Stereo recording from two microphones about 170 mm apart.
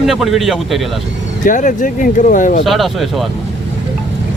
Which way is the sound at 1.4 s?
50° left (ahead or behind).